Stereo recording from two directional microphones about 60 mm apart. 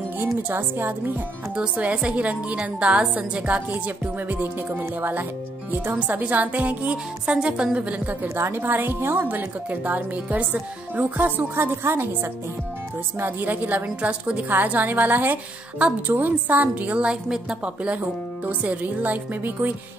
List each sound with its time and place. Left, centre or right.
0.5 s a woman's voice: right
1.6 s a woman's voice: centre
8.4 s a woman's voice: right
11.5 s a woman's voice: right
13.2 s a woman's voice: right; by 17.6 s centre
18.4 s a woman's voice: right